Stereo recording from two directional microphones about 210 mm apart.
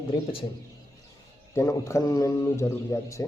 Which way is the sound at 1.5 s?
15° left (ahead or behind).